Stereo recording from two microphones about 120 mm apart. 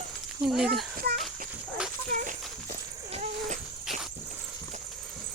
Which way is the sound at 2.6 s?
70° right (ahead or behind).